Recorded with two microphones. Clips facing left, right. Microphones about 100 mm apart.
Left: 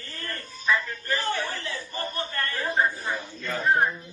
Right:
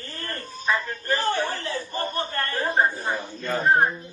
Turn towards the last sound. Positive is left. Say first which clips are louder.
# right 3 dB
turn(degrees=-40)  # may be behind; listen again after turning